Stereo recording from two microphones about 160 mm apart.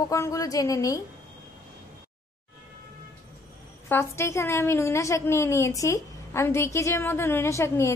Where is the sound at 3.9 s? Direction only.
15° left (ahead or behind).